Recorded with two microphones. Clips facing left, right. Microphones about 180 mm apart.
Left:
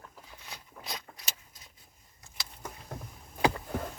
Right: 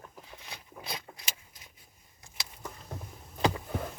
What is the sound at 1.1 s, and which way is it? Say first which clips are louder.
Vehicle: right 2 dB; 15° right (ahead or behind).